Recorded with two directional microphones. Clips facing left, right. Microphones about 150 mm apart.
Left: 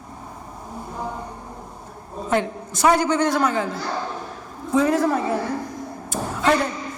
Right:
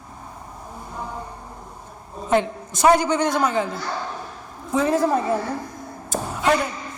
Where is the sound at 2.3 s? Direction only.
20° right (ahead or behind).